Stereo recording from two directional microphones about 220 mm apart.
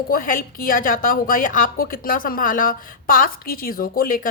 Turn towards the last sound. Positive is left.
turn(degrees=40)  # may be behind; listen again after turning